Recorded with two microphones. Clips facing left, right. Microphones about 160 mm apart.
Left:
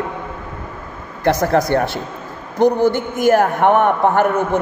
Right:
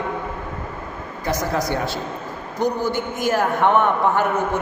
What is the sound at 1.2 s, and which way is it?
Speech, 60° left (ahead or behind).